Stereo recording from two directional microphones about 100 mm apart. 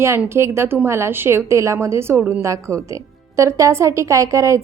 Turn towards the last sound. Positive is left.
turn(degrees=-30)  # may be behind; listen again after turning